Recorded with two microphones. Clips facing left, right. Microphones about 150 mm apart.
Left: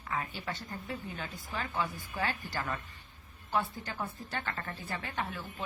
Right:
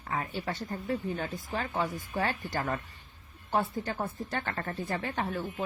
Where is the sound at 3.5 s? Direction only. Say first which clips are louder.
Right 4 dB; 40° right (ahead or behind).